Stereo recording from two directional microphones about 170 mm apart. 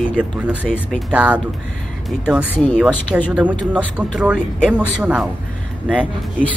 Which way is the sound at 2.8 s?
5° right (ahead or behind).